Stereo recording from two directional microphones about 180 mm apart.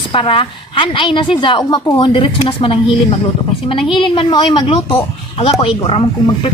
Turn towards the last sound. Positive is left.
turn(degrees=30)  # may be behind; listen again after turning